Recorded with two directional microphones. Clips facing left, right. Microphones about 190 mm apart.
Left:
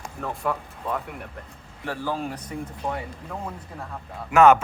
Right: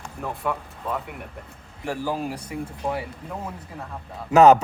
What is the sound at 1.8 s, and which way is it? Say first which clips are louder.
A man's voice: right 2 dB; 10° right (ahead or behind).